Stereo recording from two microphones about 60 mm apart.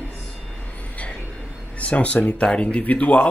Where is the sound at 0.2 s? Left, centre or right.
Centre.